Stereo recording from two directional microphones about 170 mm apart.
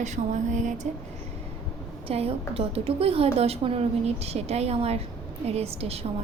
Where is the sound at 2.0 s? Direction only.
35° right (ahead or behind).